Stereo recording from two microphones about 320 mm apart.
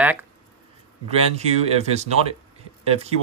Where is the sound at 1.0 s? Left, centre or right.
Centre.